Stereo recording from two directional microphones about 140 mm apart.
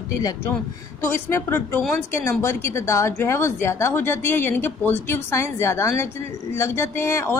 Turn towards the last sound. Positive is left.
turn(degrees=20)  # may be behind; listen again after turning